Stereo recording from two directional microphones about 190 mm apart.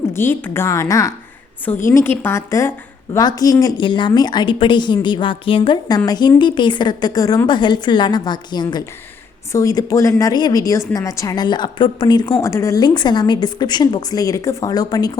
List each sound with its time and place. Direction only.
0.1 s a woman's voice: 10° left (ahead or behind)